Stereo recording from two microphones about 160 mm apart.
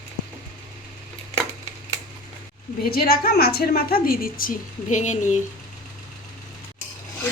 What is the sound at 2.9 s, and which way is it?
A woman's voice, 70° left (ahead or behind).